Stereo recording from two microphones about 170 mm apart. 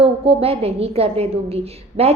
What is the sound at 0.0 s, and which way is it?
A woman's voice, 35° right (ahead or behind).